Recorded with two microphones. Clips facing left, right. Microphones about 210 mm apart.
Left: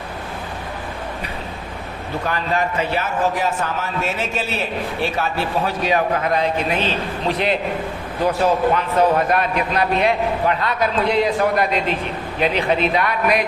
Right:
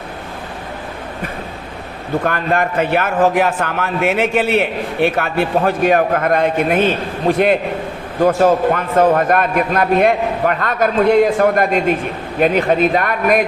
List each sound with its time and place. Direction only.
2.2 s a man's voice: 55° right (ahead or behind)